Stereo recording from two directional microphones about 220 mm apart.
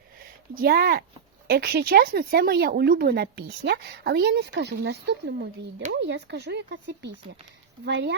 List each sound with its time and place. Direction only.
0.5 s speech: 45° right (ahead or behind)